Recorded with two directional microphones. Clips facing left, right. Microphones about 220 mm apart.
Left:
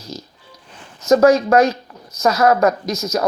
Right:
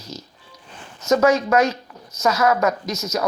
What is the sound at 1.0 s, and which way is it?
Speech, 35° left (ahead or behind).